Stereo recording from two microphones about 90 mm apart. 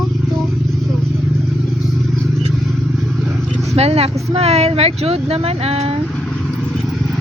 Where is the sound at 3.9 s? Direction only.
90° right.